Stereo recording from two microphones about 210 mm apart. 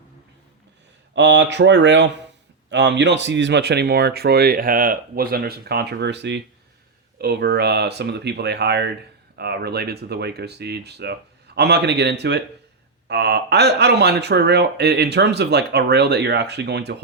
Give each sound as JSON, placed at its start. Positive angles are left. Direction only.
{"t": 1.1, "sound": "speech", "side_deg": -60}